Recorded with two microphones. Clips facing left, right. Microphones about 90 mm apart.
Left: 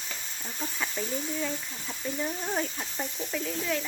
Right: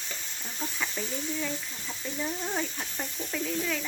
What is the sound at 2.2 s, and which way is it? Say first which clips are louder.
Speech: even; 5° left (ahead or behind).